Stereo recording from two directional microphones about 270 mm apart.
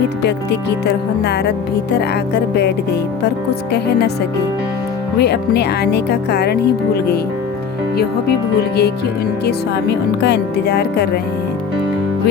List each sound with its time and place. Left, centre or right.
0.2 s speech: left
5.2 s speech: left
7.9 s speech: left